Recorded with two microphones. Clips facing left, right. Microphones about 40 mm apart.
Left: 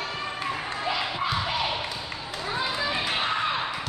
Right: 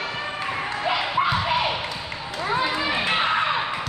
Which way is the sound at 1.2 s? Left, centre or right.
Right.